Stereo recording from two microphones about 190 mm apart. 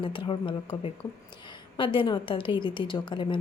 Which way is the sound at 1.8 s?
25° left (ahead or behind).